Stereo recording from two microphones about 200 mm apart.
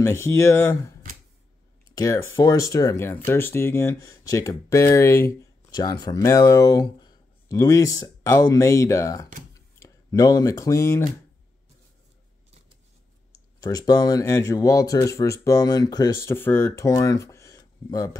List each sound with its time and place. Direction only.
0.0 s speech: 15° left (ahead or behind)
9.5 s a sound: 15° left (ahead or behind)
13.6 s speech: 20° left (ahead or behind)